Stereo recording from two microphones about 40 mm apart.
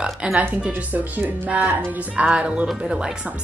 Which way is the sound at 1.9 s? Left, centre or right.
Right.